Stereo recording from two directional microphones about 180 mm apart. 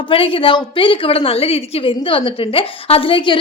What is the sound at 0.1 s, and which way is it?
A woman's voice, 30° left (ahead or behind).